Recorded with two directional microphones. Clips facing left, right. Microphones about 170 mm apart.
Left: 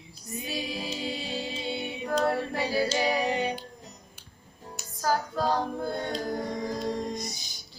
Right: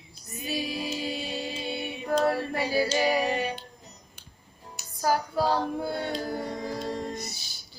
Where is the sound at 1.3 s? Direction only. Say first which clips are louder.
Even; 25° left (ahead or behind).